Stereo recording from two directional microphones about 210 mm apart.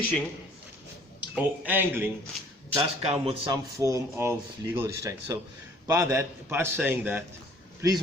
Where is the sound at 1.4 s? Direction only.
10° right (ahead or behind).